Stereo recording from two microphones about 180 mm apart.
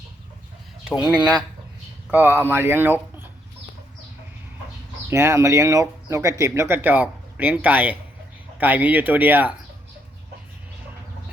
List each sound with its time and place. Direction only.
1.1 s speech: 5° right (ahead or behind)
5.0 s speech: 15° right (ahead or behind)